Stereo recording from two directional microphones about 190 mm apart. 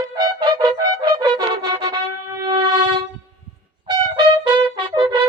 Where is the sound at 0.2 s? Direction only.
20° right (ahead or behind).